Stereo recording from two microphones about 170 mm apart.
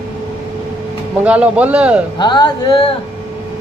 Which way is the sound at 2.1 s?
25° left (ahead or behind).